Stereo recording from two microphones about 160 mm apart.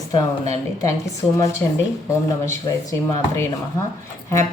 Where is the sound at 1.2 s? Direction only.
Centre (ahead or behind).